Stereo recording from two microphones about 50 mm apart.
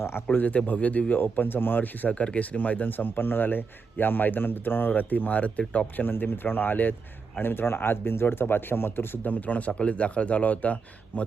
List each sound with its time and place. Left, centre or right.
0.3 s speech: left
1.2 s speech: left
6.1 s speech: left
9.2 s speech: left